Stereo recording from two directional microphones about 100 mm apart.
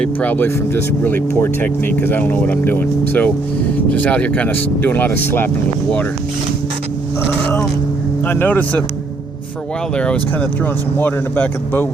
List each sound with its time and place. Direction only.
0.0 s speech: 15° left (ahead or behind)
8.3 s speech: 20° left (ahead or behind)
9.9 s speech: 10° left (ahead or behind)